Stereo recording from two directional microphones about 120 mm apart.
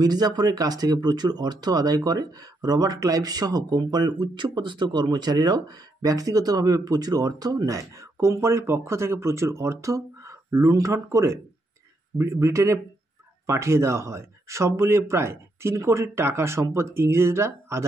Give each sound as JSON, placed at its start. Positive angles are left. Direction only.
{"t": 0.0, "sound": "speech", "side_deg": -35}